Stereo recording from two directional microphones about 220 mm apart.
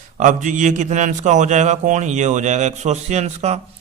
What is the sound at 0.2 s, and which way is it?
A man's voice, 35° right (ahead or behind).